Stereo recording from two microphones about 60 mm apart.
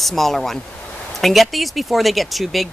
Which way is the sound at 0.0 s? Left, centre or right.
Centre.